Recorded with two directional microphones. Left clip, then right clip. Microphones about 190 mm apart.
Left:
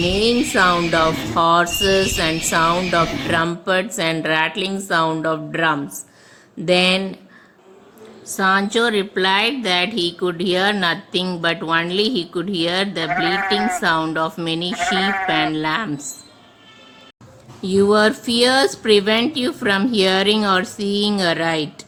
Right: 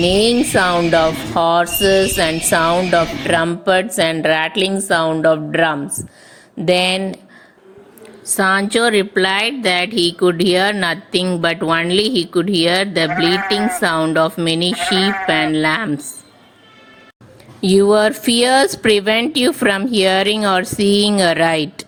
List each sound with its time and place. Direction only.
0.3 s speech: centre (ahead or behind)
1.4 s speech: 20° right (ahead or behind)
1.7 s speech: centre (ahead or behind)
3.2 s speech: 20° right (ahead or behind)
8.4 s speech: 25° right (ahead or behind)
13.1 s speech: centre (ahead or behind)
13.8 s speech: 25° right (ahead or behind)
14.7 s speech: centre (ahead or behind)
15.5 s speech: 25° right (ahead or behind)
17.6 s speech: 35° right (ahead or behind)